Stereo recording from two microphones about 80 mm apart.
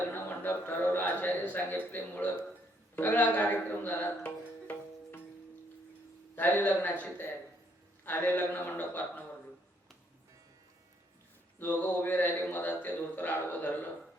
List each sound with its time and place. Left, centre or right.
0.1 s a man's voice: left
6.3 s a man's voice: left
11.6 s a man's voice: left